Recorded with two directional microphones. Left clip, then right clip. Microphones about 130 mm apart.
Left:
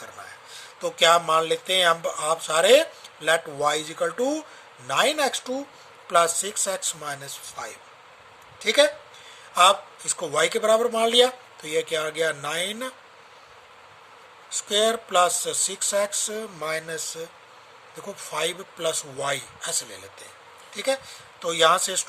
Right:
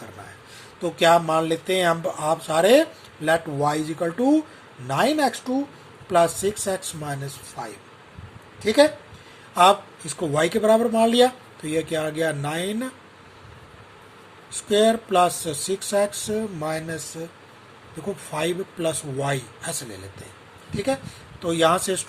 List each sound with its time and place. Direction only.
0.8 s speech: 45° left (ahead or behind)
10.2 s speech: 40° left (ahead or behind)
14.7 s speech: 40° left (ahead or behind)
18.0 s speech: 35° left (ahead or behind)
21.4 s speech: 40° left (ahead or behind)